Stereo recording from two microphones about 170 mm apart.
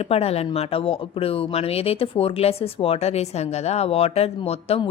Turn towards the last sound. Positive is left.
turn(degrees=35)  # may be behind; listen again after turning